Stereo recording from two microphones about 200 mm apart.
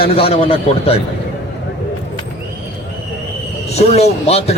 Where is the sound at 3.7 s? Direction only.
30° left (ahead or behind).